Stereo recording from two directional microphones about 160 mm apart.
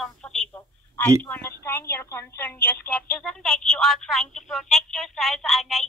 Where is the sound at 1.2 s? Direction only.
10° left (ahead or behind).